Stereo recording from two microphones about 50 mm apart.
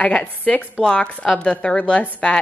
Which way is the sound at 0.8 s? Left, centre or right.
Centre.